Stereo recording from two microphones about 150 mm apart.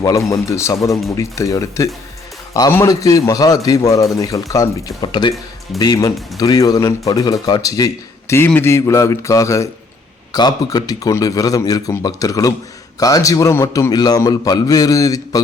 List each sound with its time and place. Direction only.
0.0 s a man's voice: 20° left (ahead or behind)